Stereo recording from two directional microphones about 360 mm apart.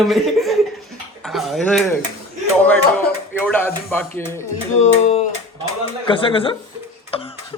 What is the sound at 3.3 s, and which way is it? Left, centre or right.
Speech, centre.